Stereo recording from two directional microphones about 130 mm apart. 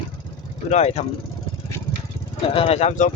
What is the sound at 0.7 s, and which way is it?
Speech, 60° left (ahead or behind).